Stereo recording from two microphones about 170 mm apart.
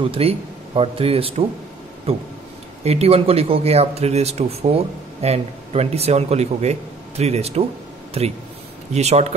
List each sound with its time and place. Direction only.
0.0 s speech: 35° right (ahead or behind)